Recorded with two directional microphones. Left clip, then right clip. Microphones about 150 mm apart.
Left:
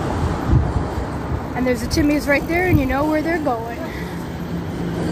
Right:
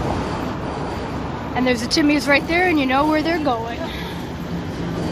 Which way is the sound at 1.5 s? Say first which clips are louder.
Right 2 dB; 5° right (ahead or behind).